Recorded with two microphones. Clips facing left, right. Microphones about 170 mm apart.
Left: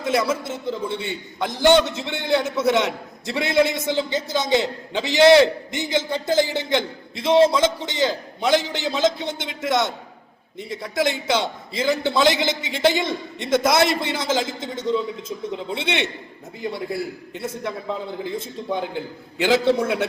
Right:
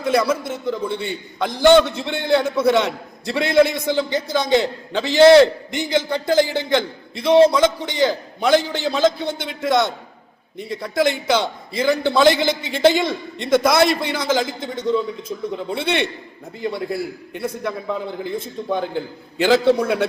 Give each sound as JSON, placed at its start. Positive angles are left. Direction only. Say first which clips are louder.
{"t": 0.0, "sound": "a man's voice", "louder": "right 3 dB", "side_deg": 25}